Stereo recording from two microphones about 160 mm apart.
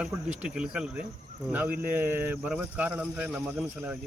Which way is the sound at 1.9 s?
15° right (ahead or behind).